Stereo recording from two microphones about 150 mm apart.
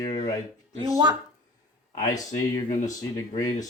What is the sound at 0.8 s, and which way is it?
Speech, 25° right (ahead or behind).